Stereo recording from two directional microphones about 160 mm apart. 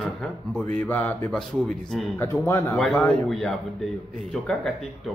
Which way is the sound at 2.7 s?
5° left (ahead or behind).